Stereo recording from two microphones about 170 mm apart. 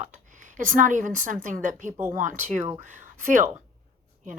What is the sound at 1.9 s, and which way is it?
Speech, 15° right (ahead or behind).